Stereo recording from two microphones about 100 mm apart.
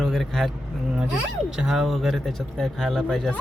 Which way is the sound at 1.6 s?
5° right (ahead or behind).